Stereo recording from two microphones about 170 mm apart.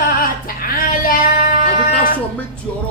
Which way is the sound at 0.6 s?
55° left (ahead or behind).